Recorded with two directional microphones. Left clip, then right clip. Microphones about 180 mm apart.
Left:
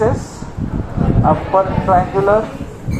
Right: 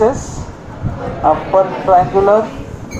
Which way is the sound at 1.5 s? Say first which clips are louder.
Right 3 dB; 35° right (ahead or behind).